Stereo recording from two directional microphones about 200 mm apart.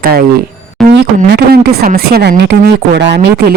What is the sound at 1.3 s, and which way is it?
Speech, 50° right (ahead or behind).